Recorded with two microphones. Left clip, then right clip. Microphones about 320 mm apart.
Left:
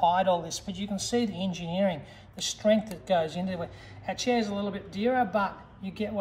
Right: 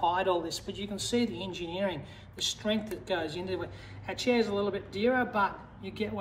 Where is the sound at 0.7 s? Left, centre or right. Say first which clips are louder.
Left 3 dB; left.